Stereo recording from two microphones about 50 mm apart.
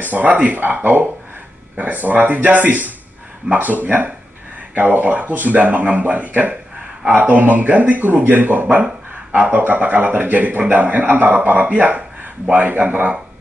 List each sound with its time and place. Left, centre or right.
0.0 s a man's voice: right
1.8 s a man's voice: right